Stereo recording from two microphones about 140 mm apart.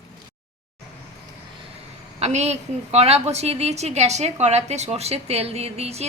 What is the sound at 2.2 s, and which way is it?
A woman's voice, 50° right (ahead or behind).